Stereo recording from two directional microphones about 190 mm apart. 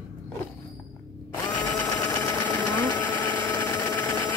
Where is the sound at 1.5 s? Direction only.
10° left (ahead or behind).